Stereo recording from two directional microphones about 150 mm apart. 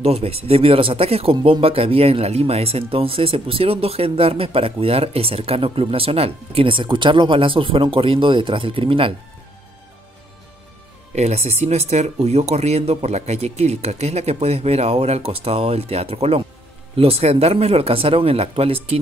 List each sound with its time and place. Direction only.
0.0 s speech: 40° right (ahead or behind)
11.1 s speech: 45° right (ahead or behind)